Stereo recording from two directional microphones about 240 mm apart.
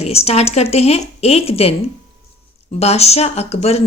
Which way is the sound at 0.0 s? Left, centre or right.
Left.